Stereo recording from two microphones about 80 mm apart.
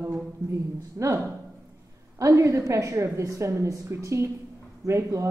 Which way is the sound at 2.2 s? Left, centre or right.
Right.